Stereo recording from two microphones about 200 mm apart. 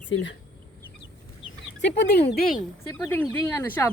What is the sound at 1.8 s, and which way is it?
Speech, 60° left (ahead or behind).